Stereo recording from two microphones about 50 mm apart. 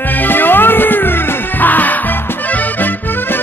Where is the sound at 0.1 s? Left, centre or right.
Left.